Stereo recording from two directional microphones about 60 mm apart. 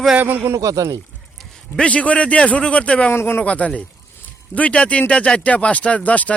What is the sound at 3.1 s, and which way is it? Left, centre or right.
Speech, left.